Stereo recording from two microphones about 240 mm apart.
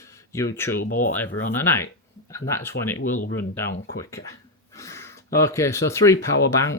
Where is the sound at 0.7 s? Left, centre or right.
Left.